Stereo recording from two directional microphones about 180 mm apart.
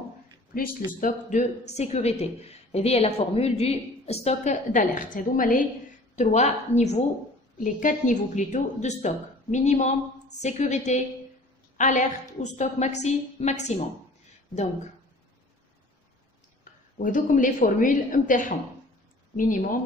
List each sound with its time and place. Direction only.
0.5 s a woman's voice: 50° left (ahead or behind)
1.0 s speech: 40° left (ahead or behind)
17.0 s a woman's voice: 45° left (ahead or behind)